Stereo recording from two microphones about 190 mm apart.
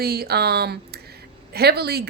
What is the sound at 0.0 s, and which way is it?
Speech, 55° right (ahead or behind).